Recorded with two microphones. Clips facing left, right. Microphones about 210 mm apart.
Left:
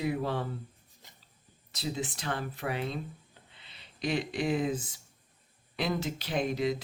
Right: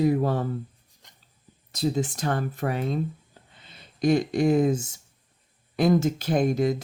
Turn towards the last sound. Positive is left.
turn(degrees=-45)  # may be behind; listen again after turning